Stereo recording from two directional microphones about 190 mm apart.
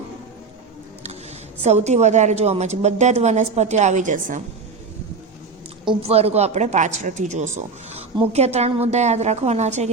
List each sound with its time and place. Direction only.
1.6 s a woman's voice: 35° right (ahead or behind)
5.9 s a woman's voice: 30° right (ahead or behind)